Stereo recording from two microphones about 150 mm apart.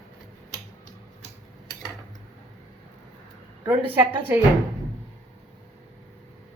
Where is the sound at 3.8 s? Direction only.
10° right (ahead or behind).